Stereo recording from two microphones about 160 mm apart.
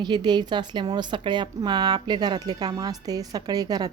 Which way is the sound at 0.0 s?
30° right (ahead or behind).